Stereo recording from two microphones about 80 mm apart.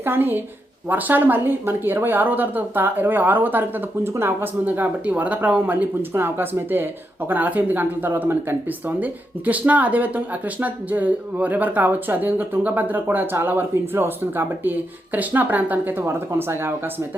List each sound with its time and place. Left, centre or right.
0.0 s speech: right